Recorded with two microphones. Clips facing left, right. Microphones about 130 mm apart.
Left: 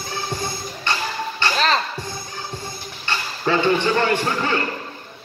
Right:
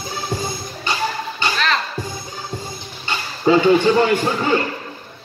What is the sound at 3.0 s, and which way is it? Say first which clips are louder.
A man's voice: right 5 dB; 15° right (ahead or behind).